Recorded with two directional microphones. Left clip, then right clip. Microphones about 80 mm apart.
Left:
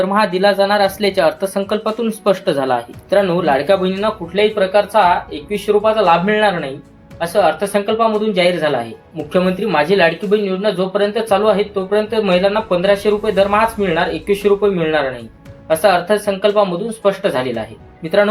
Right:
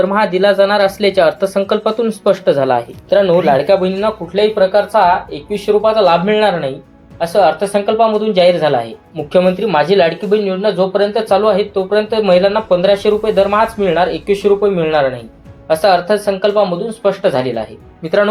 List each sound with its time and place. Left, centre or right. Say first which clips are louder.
0.0 s speech: right 2 dB; right; by 3.3 s centre
3.4 s speech: right 3 dB; right
7.2 s speech: right 3 dB; right